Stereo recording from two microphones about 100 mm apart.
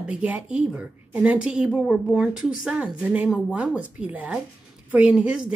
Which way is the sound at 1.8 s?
5° left (ahead or behind).